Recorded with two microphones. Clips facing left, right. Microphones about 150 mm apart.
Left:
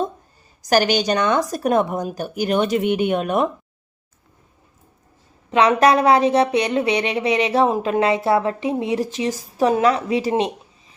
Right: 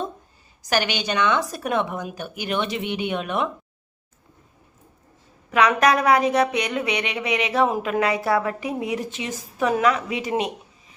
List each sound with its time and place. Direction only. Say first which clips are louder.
0.6 s speech: left 7 dB; 40° left (ahead or behind)
5.5 s speech: left 4 dB; 30° left (ahead or behind)